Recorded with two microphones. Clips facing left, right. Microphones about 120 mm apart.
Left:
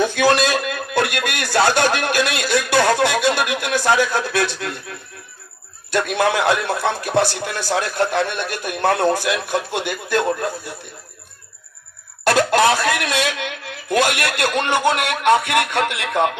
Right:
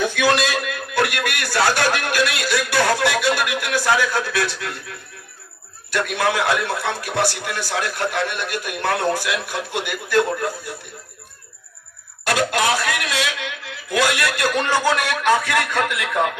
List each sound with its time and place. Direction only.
0.0 s a sound: 35° left (ahead or behind)
5.9 s a man's voice: 25° left (ahead or behind)
12.2 s cough: 35° left (ahead or behind)
13.1 s speech: 55° left (ahead or behind)
14.5 s a man's voice: 20° left (ahead or behind)